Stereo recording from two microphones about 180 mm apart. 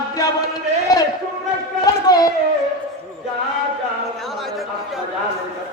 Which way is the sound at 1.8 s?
20° left (ahead or behind).